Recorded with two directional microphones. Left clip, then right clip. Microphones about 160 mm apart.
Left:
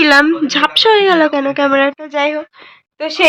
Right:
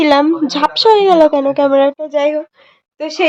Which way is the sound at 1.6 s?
25° left (ahead or behind).